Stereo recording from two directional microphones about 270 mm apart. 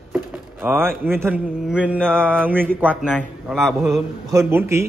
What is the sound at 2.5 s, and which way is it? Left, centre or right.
Speech, centre.